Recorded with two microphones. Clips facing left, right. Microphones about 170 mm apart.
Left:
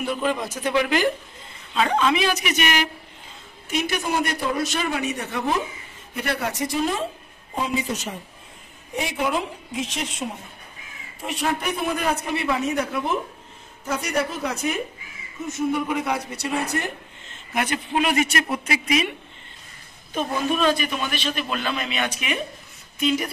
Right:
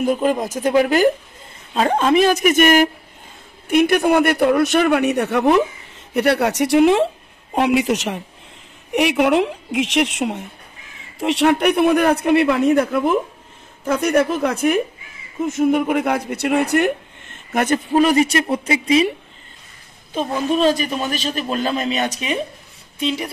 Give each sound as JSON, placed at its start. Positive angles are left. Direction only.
{"t": 0.0, "sound": "a man's voice", "side_deg": -45}
{"t": 17.5, "sound": "a man's voice", "side_deg": -45}
{"t": 20.2, "sound": "a man's voice", "side_deg": -30}